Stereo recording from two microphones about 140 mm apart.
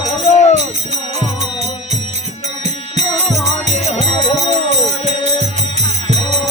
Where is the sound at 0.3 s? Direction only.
55° left (ahead or behind).